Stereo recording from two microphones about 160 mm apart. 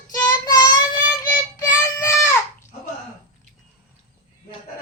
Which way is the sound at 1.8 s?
15° left (ahead or behind).